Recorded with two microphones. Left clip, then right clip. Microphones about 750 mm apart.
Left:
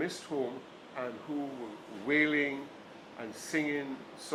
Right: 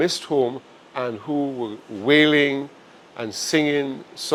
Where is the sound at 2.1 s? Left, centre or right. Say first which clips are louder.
Right 13 dB; right.